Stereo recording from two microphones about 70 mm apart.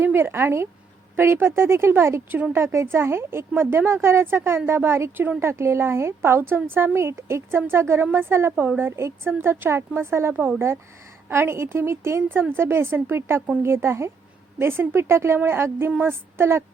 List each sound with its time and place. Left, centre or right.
0.0 s a woman's voice: right
8.5 s a woman's voice: right